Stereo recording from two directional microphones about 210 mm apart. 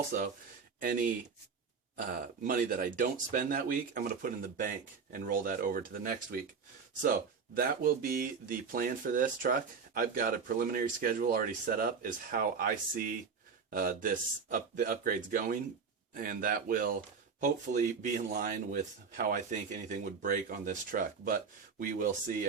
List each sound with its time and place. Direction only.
0.8 s speech: 40° right (ahead or behind)